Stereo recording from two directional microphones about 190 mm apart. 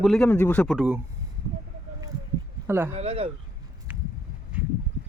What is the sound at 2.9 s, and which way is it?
Speech, 35° right (ahead or behind).